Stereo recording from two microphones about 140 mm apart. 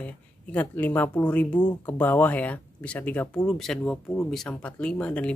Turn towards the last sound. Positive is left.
turn(degrees=10)  # may be behind; listen again after turning